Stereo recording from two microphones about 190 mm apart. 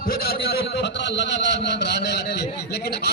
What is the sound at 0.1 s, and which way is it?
A man's voice, 55° left (ahead or behind).